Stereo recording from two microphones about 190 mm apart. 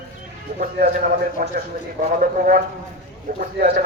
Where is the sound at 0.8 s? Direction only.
50° right (ahead or behind).